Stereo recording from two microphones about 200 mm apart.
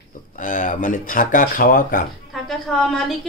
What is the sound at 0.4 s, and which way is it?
Speech, 40° left (ahead or behind).